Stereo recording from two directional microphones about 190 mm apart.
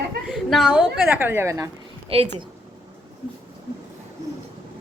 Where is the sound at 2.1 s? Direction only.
30° right (ahead or behind).